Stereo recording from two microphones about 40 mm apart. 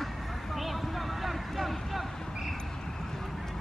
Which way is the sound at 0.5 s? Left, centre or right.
Centre.